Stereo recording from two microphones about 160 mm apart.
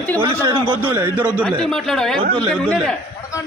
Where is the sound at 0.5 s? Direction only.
35° right (ahead or behind).